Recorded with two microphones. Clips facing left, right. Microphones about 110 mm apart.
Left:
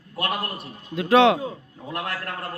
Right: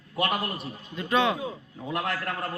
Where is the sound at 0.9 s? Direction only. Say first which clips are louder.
Left 8 dB; 85° left.